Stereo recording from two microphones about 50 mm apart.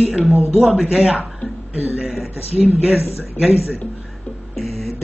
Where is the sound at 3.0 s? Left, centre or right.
Left.